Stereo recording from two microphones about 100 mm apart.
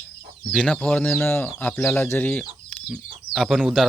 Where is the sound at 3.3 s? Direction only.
Centre (ahead or behind).